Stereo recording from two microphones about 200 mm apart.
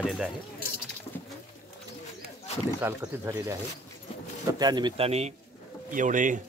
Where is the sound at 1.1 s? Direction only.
10° left (ahead or behind).